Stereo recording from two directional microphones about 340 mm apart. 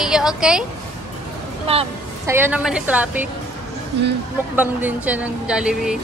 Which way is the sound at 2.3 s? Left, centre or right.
Centre.